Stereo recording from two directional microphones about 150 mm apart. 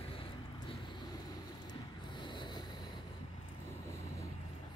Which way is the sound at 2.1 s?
30° left (ahead or behind).